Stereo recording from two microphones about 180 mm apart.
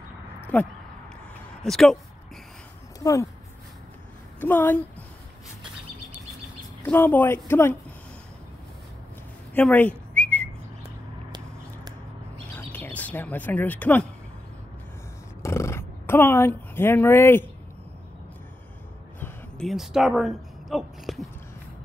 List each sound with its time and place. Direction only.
0.5 s speech: 5° left (ahead or behind)
3.0 s speech: 20° left (ahead or behind)
4.4 s speech: 10° left (ahead or behind)
6.8 s speech: 10° left (ahead or behind)
9.5 s whistling: 10° left (ahead or behind)
12.5 s speech: 10° left (ahead or behind)
15.4 s a sound: 15° left (ahead or behind)
19.1 s a sound: 10° left (ahead or behind)
19.7 s speech: centre (ahead or behind)